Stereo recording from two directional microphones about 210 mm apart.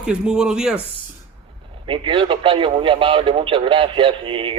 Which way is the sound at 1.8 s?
25° right (ahead or behind).